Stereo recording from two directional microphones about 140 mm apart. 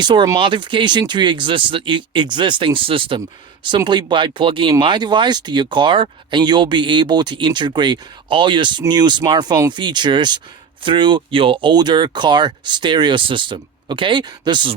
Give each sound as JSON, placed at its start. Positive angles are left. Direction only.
{"t": 0.0, "sound": "speech", "side_deg": -35}